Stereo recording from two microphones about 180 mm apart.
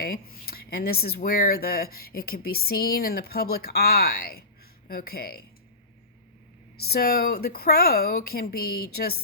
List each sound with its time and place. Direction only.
0.0 s speech: 55° left (ahead or behind)
6.7 s speech: 60° left (ahead or behind)